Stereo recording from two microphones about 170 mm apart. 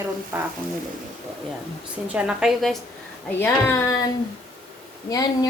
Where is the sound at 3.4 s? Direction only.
15° left (ahead or behind).